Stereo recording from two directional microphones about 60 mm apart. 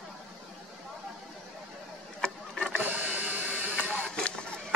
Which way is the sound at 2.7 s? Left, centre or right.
Right.